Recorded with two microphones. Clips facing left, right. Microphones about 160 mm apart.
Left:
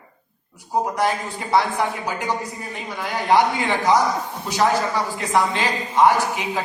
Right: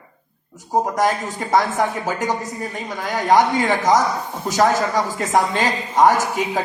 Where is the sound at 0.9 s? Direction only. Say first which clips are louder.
Right 3 dB; 45° right (ahead or behind).